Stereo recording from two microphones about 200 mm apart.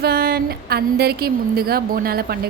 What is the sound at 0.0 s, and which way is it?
Speech, 50° right (ahead or behind).